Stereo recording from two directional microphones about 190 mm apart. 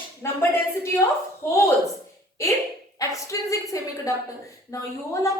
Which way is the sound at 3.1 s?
15° left (ahead or behind).